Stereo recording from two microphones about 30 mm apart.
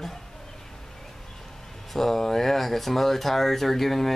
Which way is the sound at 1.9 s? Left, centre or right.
Centre.